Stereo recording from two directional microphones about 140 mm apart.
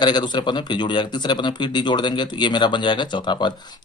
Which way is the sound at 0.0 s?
30° left (ahead or behind).